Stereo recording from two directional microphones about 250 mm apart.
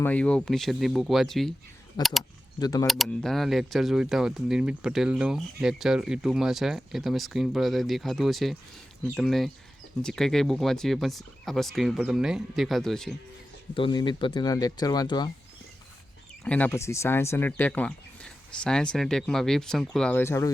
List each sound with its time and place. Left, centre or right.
0.0 s speech: centre
2.6 s speech: centre
2.8 s speech: centre
13.7 s speech: centre
16.4 s speech: centre